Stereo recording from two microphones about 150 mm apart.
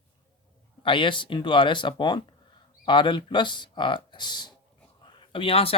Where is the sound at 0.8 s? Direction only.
35° left (ahead or behind).